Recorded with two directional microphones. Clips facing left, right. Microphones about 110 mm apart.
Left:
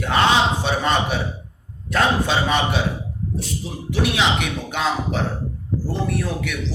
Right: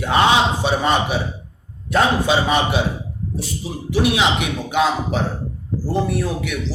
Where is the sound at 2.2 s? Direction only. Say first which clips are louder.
Right 3 dB; 5° right (ahead or behind).